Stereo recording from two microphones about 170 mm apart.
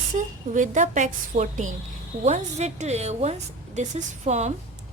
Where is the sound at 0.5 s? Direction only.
50° right (ahead or behind).